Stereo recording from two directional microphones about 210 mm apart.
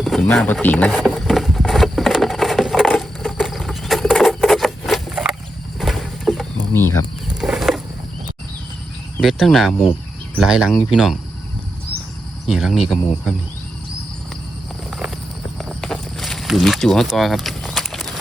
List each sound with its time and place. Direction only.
0.0 s a sound: 5° left (ahead or behind)
5.8 s mechanisms: centre (ahead or behind)
7.4 s wild animals: centre (ahead or behind)
9.1 s speech: centre (ahead or behind)
12.5 s speech: centre (ahead or behind)
14.8 s horse: 5° right (ahead or behind)
15.5 s a sound: centre (ahead or behind)